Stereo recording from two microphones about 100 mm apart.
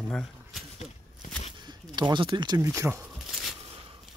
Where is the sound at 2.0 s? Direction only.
50° right (ahead or behind).